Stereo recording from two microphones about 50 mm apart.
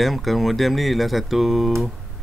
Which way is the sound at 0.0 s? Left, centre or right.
Centre.